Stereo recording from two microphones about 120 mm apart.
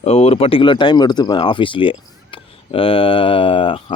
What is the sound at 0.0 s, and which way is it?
Speech, 60° left (ahead or behind).